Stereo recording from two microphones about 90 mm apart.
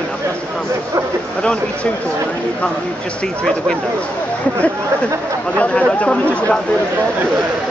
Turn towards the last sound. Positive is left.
turn(degrees=15)  # may be behind; listen again after turning